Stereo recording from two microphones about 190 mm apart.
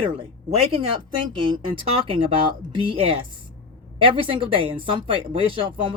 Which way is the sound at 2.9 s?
30° right (ahead or behind).